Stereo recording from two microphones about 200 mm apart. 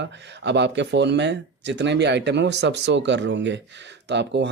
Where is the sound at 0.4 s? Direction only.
60° right (ahead or behind).